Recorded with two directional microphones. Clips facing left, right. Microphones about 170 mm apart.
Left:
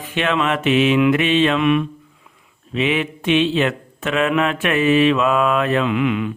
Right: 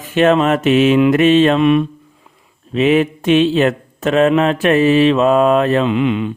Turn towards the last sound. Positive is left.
turn(degrees=-30)  # may be behind; listen again after turning